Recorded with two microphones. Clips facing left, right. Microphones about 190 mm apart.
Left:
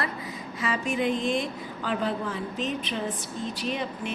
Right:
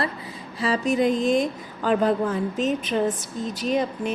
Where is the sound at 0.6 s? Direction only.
35° right (ahead or behind).